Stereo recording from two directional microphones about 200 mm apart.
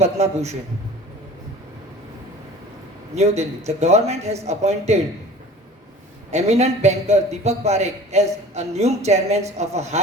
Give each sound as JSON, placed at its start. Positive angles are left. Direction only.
{"t": 0.0, "sound": "a man's voice", "side_deg": -35}
{"t": 3.2, "sound": "a man's voice", "side_deg": -35}
{"t": 6.3, "sound": "a man's voice", "side_deg": -35}